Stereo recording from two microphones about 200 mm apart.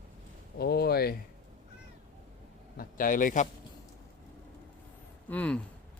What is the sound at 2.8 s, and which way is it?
Speech, 45° left (ahead or behind).